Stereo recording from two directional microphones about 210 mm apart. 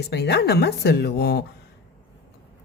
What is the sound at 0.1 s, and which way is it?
Speech, 50° left (ahead or behind).